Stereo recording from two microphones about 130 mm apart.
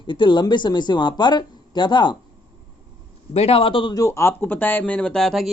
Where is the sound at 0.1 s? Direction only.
40° left (ahead or behind).